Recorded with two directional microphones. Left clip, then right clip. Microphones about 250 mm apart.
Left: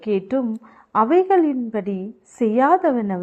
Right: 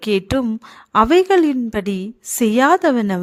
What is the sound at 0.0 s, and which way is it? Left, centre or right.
A woman's voice, right.